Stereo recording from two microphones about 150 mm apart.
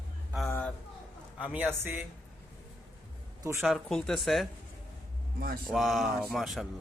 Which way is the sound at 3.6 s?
Centre (ahead or behind).